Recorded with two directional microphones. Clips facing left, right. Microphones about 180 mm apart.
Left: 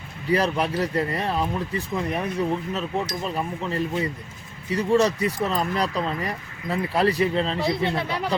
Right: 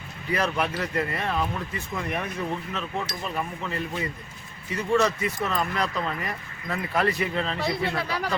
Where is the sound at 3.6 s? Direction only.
30° left (ahead or behind).